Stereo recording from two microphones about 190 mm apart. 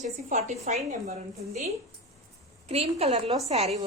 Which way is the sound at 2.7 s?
35° right (ahead or behind).